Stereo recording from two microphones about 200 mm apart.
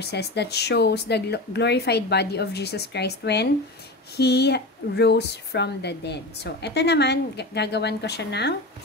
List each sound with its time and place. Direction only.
0.0 s speech: 55° left (ahead or behind)